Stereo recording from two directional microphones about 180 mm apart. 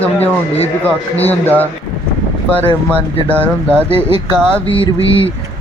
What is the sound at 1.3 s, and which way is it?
Speech, 10° left (ahead or behind).